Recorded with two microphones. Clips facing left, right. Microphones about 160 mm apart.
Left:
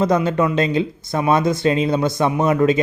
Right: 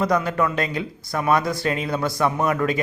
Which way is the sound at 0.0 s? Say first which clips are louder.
Left 4 dB; 25° left (ahead or behind).